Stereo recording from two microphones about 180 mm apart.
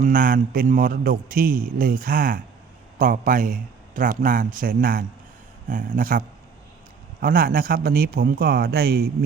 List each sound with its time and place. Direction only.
0.0 s a man's voice: 50° right (ahead or behind)